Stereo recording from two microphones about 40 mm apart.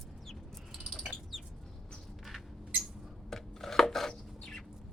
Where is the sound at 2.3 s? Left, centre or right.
Centre.